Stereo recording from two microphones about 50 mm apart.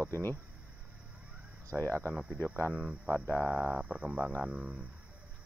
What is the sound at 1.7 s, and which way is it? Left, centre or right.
Speech, right.